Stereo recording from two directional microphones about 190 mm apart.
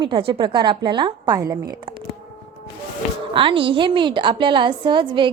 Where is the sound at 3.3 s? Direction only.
25° right (ahead or behind).